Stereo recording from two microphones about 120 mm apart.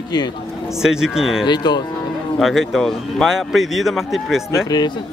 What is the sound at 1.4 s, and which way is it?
Speech, 40° left (ahead or behind).